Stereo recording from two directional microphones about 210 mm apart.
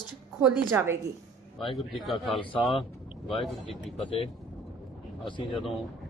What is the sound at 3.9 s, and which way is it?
Speech, 25° left (ahead or behind).